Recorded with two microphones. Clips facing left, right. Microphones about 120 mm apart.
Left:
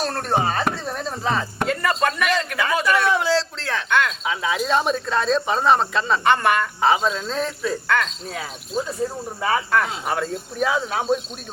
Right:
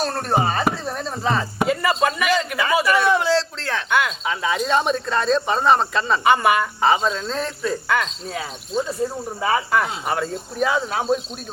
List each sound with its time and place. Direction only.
0.0 s speech: centre (ahead or behind)